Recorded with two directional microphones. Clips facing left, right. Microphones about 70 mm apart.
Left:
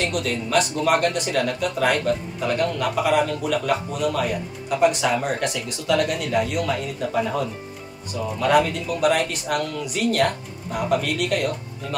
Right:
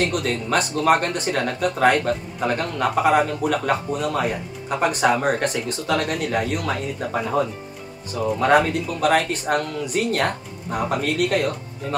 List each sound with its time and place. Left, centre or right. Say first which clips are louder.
0.0 s speech: right 2 dB; right